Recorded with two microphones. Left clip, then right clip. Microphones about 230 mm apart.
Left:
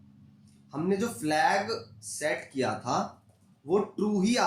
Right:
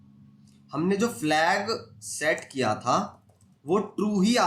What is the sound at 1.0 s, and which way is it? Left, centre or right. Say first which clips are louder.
A man's voice: right 2 dB; right.